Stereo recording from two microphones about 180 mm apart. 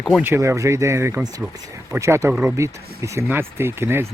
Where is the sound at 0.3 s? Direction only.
15° right (ahead or behind).